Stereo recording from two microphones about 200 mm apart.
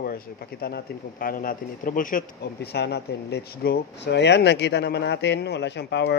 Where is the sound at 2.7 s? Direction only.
55° left (ahead or behind).